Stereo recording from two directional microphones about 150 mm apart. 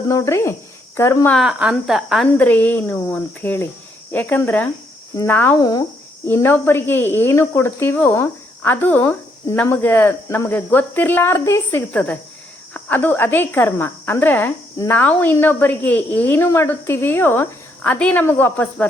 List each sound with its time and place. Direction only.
0.1 s speech: 20° left (ahead or behind)
1.3 s a woman's voice: 5° right (ahead or behind)
2.4 s speech: 10° left (ahead or behind)
5.5 s speech: 25° left (ahead or behind)
6.2 s speech: 15° left (ahead or behind)